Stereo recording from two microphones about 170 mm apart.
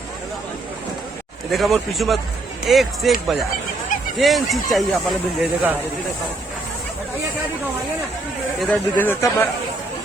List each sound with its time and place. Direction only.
1.5 s speech: centre (ahead or behind)
8.5 s speech: centre (ahead or behind)
9.0 s speech: 15° left (ahead or behind)